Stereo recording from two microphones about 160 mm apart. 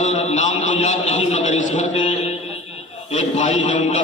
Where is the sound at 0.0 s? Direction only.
45° left (ahead or behind).